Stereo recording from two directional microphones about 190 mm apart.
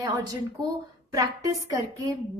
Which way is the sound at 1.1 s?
20° right (ahead or behind).